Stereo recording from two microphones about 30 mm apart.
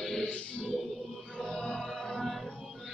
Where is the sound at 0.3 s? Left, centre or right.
Left.